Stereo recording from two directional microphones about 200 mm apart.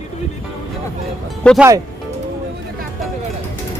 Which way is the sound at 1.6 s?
15° right (ahead or behind).